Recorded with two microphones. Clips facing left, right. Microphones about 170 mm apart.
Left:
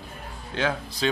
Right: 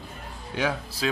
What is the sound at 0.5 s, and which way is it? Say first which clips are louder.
Speech: left 1 dB; 10° right (ahead or behind).